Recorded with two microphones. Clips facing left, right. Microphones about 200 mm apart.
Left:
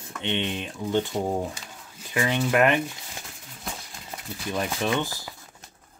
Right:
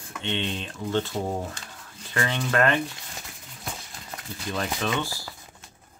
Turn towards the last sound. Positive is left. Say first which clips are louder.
# left 2 dB
turn(degrees=15)  # may be behind; listen again after turning